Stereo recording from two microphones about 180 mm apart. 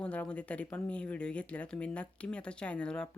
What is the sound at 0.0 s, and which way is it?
Speech, 5° left (ahead or behind).